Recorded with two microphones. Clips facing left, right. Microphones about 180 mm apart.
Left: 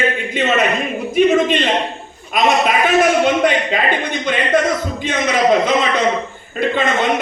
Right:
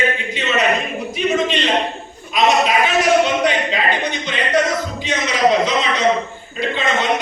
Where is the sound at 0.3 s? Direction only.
50° left (ahead or behind).